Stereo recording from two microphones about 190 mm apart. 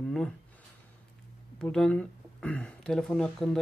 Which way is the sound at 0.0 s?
Centre (ahead or behind).